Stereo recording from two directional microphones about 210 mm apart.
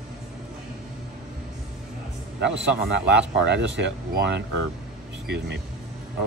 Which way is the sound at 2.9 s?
55° right (ahead or behind).